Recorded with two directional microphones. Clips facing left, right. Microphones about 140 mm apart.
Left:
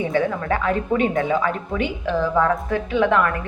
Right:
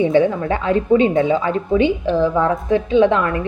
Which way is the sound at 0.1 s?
20° right (ahead or behind).